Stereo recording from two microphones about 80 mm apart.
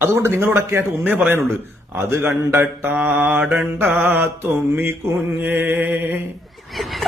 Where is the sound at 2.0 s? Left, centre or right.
Right.